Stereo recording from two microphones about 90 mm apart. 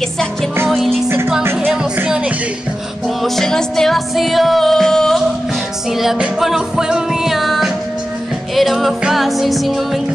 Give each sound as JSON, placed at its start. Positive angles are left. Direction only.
{"t": 0.7, "sound": "music", "side_deg": 0}
{"t": 1.0, "sound": "music", "side_deg": -25}
{"t": 2.0, "sound": "music", "side_deg": -10}
{"t": 3.2, "sound": "music", "side_deg": 5}